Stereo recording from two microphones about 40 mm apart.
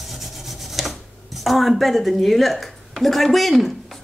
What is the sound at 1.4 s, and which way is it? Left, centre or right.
Speech, centre.